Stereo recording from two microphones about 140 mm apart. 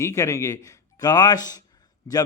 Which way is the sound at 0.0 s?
20° left (ahead or behind).